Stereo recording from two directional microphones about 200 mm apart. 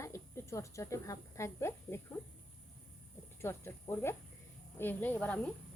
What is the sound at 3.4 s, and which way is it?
Speech, 15° left (ahead or behind).